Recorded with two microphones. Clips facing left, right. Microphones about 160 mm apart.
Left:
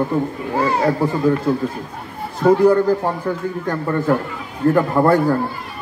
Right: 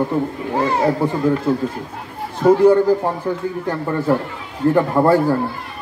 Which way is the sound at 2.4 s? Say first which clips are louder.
Right 1 dB; 5° right (ahead or behind).